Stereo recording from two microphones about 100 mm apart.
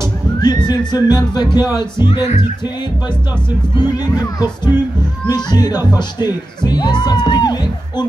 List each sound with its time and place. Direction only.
0.4 s music: 45° left (ahead or behind)
2.0 s speech: 60° left (ahead or behind)
3.7 s music: 45° left (ahead or behind)